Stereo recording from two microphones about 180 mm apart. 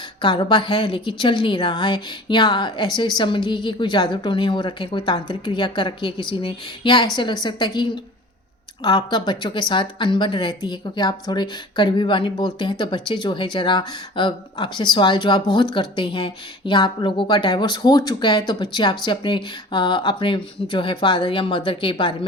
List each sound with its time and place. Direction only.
0.2 s a woman's voice: 25° left (ahead or behind)